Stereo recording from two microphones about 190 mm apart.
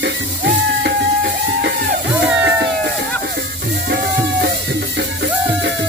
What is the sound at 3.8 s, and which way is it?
Music, 60° right (ahead or behind).